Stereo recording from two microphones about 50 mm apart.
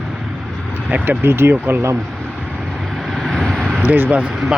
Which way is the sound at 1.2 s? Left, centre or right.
Right.